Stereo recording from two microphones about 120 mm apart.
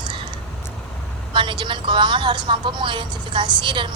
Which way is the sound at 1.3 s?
40° right (ahead or behind).